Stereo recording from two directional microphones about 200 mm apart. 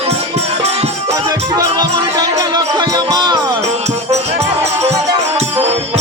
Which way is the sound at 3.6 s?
35° right (ahead or behind).